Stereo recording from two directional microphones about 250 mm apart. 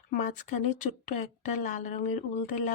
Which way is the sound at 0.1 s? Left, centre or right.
Left.